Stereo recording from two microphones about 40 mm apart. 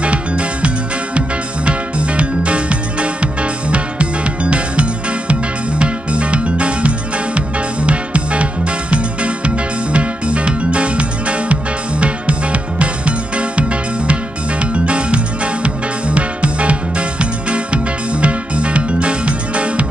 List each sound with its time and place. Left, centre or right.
0.0 s music: right
1.7 s music: right
18.1 s music: right